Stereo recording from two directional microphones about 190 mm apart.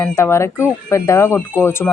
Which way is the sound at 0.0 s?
15° left (ahead or behind).